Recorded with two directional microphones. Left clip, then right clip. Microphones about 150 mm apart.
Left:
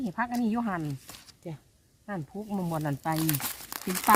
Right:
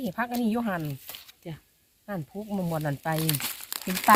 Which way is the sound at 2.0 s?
80° right.